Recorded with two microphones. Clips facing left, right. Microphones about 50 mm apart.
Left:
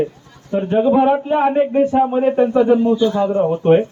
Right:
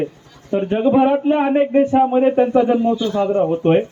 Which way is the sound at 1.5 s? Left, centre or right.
Right.